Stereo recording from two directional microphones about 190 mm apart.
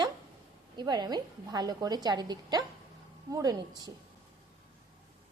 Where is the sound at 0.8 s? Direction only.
20° right (ahead or behind).